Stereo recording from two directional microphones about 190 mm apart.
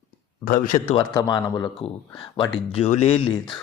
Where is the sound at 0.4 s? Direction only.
45° left (ahead or behind).